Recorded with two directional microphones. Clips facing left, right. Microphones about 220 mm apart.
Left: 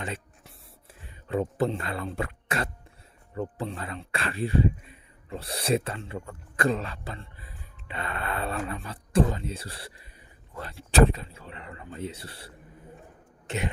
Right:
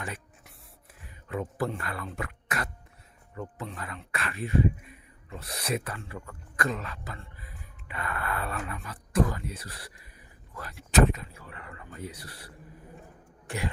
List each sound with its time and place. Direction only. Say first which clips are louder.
0.0 s writing: left 3 dB; 25° left (ahead or behind)
0.9 s speech: left 6 dB; 25° left (ahead or behind)